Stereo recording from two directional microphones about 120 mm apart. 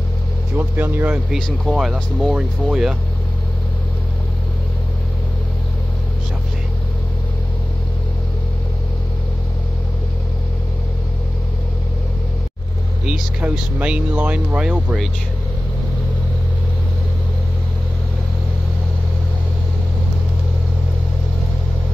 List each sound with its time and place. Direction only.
0.6 s speech: 15° right (ahead or behind)
1.3 s speech: 5° right (ahead or behind)
13.0 s speech: 10° right (ahead or behind)